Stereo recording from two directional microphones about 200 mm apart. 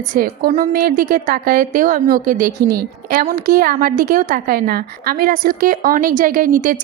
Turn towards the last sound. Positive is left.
turn(degrees=-45)  # may be behind; listen again after turning